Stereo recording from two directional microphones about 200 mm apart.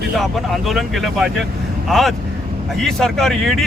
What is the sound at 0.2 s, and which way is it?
Speech, centre (ahead or behind).